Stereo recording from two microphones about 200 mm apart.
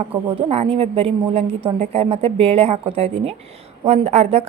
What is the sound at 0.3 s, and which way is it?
A woman's voice, 30° right (ahead or behind).